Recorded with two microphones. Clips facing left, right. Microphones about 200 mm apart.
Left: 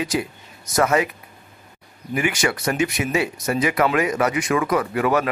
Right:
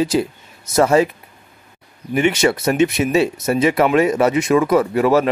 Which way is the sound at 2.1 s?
25° right (ahead or behind).